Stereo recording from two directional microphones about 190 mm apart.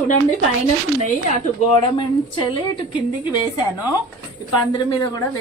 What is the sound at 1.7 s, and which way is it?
Speech, 25° left (ahead or behind).